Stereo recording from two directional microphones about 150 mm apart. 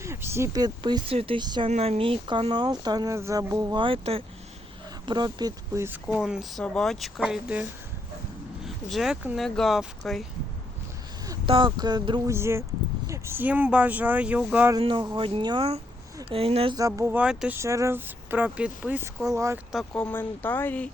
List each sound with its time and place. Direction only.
0.0 s speech: 15° right (ahead or behind)
1.7 s speech: 45° right (ahead or behind); by 3.8 s 25° right (ahead or behind)
3.8 s speech: 40° right (ahead or behind); by 7.7 s 5° right (ahead or behind)
8.6 s a sound: centre (ahead or behind)
9.2 s speech: centre (ahead or behind)
11.4 s speech: 35° right (ahead or behind)
12.3 s speech: 15° right (ahead or behind)
14.8 s speech: 35° right (ahead or behind)
16.7 s speech: 25° right (ahead or behind)
17.1 s speech: 10° right (ahead or behind)
17.6 s speech: 20° right (ahead or behind)
19.2 s speech: 20° right (ahead or behind)
19.7 s speech: 5° left (ahead or behind)